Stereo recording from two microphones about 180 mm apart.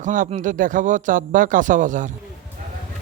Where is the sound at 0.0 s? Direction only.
45° right (ahead or behind).